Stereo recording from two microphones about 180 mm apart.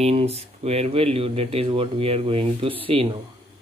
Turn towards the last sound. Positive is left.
turn(degrees=-30)  # may be behind; listen again after turning